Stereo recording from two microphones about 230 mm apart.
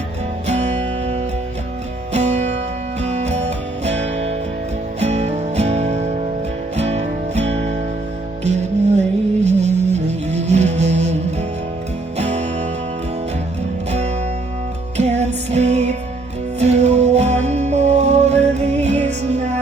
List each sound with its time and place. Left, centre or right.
0.4 s music: right
14.9 s music: right